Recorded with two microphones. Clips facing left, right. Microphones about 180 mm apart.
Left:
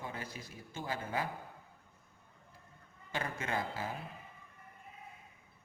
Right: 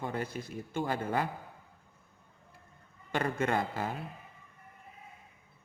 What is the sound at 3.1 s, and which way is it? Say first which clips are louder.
Speech: right 7 dB; 60° right (ahead or behind).